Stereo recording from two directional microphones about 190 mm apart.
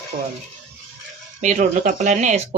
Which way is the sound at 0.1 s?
45° right (ahead or behind).